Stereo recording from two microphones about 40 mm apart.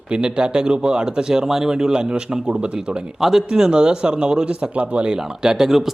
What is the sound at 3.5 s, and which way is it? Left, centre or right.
Speech, right.